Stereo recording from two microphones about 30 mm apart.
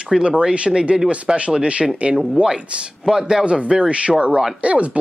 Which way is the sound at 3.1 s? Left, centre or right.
Centre.